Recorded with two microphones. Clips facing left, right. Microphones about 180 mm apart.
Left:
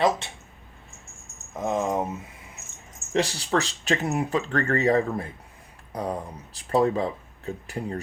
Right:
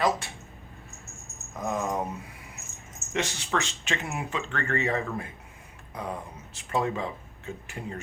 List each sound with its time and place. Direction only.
1.5 s keys jangling: 25° left (ahead or behind)
3.1 s speech: 35° left (ahead or behind)